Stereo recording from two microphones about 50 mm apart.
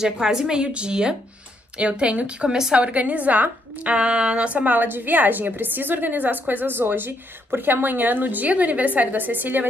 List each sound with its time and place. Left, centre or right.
0.0 s a woman's voice: centre
2.8 s a woman's voice: right
4.7 s a woman's voice: right